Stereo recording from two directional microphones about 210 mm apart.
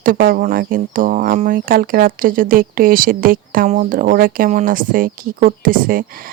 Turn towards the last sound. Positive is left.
turn(degrees=-40)  # may be behind; listen again after turning